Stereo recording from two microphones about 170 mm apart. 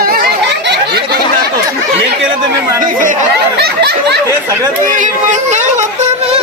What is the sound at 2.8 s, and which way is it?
Speech, 50° right (ahead or behind).